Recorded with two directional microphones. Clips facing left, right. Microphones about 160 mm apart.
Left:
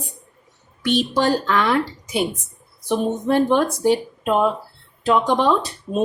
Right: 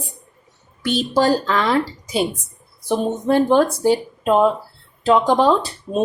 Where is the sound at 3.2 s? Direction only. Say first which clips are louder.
Right 3 dB; 35° right (ahead or behind).